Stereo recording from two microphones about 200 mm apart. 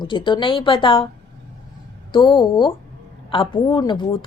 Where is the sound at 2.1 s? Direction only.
25° left (ahead or behind).